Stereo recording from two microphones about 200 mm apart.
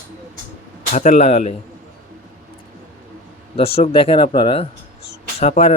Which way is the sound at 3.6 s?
30° left (ahead or behind).